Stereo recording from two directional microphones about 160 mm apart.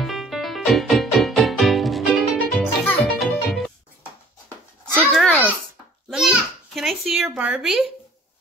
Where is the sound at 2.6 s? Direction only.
10° left (ahead or behind).